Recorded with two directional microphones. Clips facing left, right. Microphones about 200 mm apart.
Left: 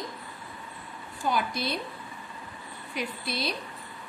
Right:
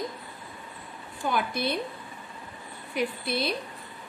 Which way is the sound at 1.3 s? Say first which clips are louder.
Right 2 dB; 55° right (ahead or behind).